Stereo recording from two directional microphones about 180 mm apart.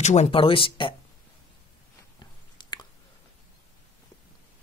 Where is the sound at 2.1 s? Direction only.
25° left (ahead or behind).